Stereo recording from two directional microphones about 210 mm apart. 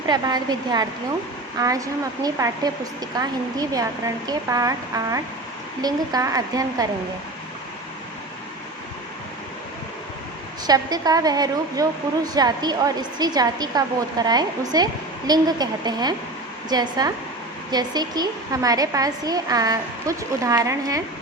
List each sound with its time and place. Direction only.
0.1 s a woman's voice: 20° right (ahead or behind)
5.8 s a woman's voice: 20° right (ahead or behind)
10.7 s a woman's voice: 20° right (ahead or behind)